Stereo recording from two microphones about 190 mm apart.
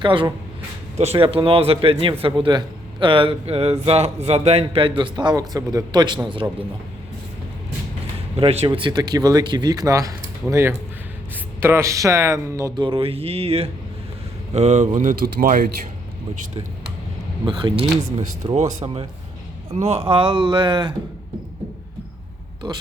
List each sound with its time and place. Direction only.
0.0 s a man's voice: 25° right (ahead or behind)
8.4 s a man's voice: 30° right (ahead or behind); by 15.7 s 50° right (ahead or behind)
17.4 s a man's voice: 25° right (ahead or behind)
18.2 s a man's voice: 35° right (ahead or behind)
22.6 s a man's voice: 20° right (ahead or behind)